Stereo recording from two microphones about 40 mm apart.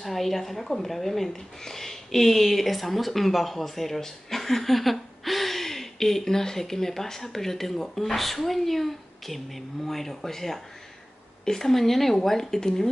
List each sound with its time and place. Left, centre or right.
0.0 s a woman's voice: centre